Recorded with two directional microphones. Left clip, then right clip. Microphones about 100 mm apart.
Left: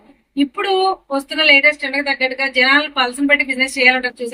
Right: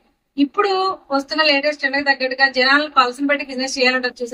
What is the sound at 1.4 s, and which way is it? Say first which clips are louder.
A woman's voice: left 6 dB; 50° right (ahead or behind).